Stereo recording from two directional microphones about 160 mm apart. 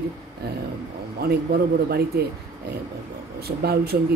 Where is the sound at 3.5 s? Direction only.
80° right.